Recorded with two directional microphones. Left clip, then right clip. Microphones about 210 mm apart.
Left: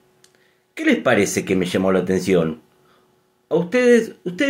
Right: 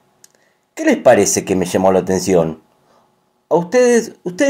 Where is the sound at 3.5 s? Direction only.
20° right (ahead or behind).